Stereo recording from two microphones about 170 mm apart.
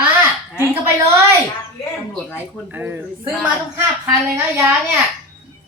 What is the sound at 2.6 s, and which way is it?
A woman's voice, 10° right (ahead or behind).